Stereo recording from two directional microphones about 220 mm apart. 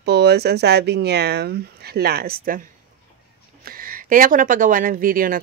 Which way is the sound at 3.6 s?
40° right (ahead or behind).